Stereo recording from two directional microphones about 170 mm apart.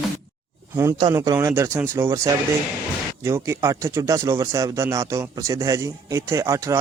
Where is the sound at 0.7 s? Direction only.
15° right (ahead or behind).